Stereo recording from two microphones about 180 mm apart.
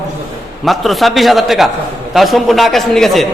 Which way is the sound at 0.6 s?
Centre (ahead or behind).